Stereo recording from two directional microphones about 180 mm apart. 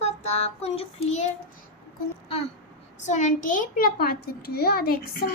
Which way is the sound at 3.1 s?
45° left (ahead or behind).